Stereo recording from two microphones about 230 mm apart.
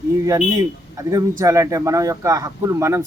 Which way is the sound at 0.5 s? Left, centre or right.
Centre.